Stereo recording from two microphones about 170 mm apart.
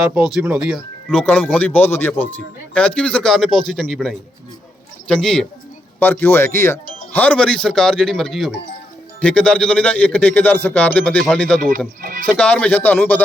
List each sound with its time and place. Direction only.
0.0 s a man's voice: 5° right (ahead or behind)
1.1 s a man's voice: 10° left (ahead or behind)
12.0 s a sound: 55° right (ahead or behind)
12.3 s speech: 5° left (ahead or behind)